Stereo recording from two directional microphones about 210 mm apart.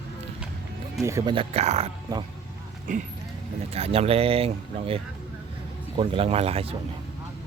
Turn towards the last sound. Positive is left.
turn(degrees=-30)  # may be behind; listen again after turning